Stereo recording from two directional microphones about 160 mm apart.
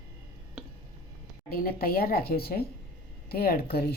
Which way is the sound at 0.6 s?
5° right (ahead or behind).